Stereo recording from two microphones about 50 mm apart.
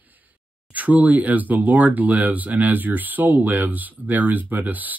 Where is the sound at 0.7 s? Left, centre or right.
Right.